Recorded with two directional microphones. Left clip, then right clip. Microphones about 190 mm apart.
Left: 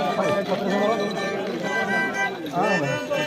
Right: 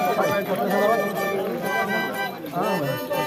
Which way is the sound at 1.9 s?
20° right (ahead or behind).